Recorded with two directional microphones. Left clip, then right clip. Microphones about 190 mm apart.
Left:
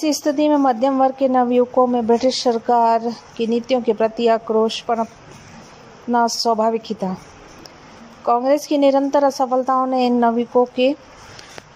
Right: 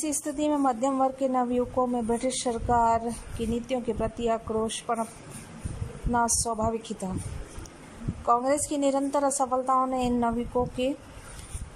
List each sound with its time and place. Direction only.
0.0 s a woman's voice: 10° left (ahead or behind)
6.1 s speech: 20° left (ahead or behind)
6.5 s a woman's voice: 10° left (ahead or behind)
8.3 s a woman's voice: 15° left (ahead or behind)